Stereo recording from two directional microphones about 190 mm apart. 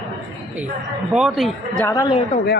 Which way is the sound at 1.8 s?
15° left (ahead or behind).